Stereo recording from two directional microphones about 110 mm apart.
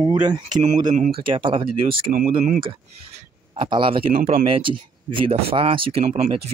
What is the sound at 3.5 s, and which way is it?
Speech, 50° right (ahead or behind).